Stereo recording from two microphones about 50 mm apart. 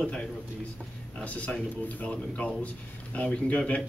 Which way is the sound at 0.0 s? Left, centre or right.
Centre.